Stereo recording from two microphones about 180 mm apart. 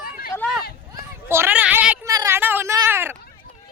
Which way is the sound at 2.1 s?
15° right (ahead or behind).